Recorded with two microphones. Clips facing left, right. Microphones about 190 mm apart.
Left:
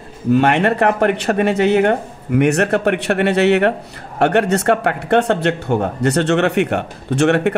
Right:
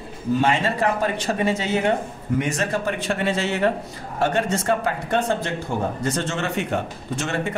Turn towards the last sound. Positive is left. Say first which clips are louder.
# left 11 dB
turn(degrees=70)  # may be behind; listen again after turning